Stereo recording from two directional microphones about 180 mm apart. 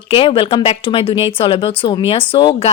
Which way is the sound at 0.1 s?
30° left (ahead or behind).